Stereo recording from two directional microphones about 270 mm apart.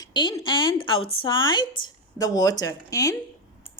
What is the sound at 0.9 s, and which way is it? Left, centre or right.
Speech, left.